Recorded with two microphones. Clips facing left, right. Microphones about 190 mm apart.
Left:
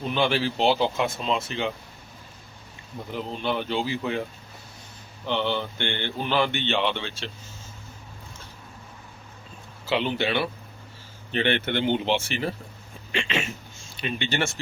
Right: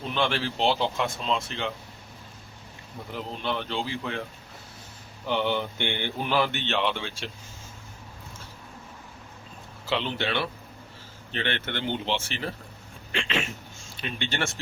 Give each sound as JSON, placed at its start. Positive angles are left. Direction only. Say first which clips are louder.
{"t": 0.1, "sound": "speech", "louder": "left 3 dB", "side_deg": 5}
{"t": 3.1, "sound": "speech", "louder": "left 3 dB", "side_deg": 0}
{"t": 5.2, "sound": "speech", "louder": "even", "side_deg": -10}
{"t": 9.8, "sound": "speech", "louder": "left 4 dB", "side_deg": 5}
{"t": 11.3, "sound": "speech", "louder": "left 6 dB", "side_deg": 15}
{"t": 13.1, "sound": "speech", "louder": "left 2 dB", "side_deg": 0}